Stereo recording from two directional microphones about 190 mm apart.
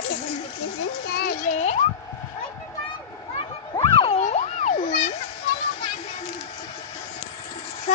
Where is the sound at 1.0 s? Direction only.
50° left (ahead or behind); by 1.8 s 35° left (ahead or behind).